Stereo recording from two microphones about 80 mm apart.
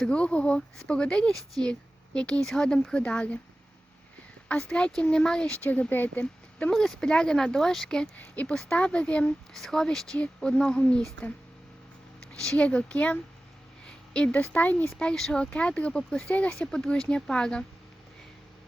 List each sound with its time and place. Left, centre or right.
0.0 s speech: centre
4.4 s speech: centre
6.7 s speech: centre
8.1 s speech: centre